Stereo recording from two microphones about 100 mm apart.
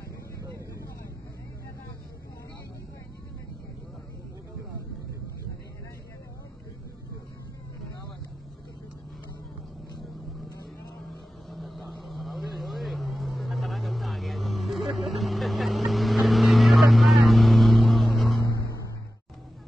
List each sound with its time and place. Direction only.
11.5 s vehicle: centre (ahead or behind)